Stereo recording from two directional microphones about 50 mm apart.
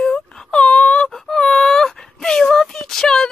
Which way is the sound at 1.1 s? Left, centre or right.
Centre.